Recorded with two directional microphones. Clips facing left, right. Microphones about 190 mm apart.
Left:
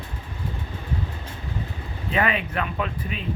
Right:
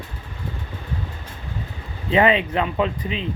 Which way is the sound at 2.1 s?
25° right (ahead or behind).